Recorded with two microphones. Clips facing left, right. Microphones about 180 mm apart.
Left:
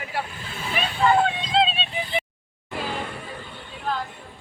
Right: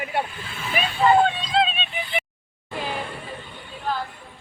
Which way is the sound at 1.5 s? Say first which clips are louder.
Even; 25° left (ahead or behind).